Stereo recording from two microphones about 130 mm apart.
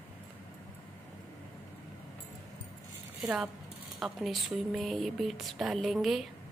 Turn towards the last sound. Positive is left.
turn(degrees=0)  # may be behind; listen again after turning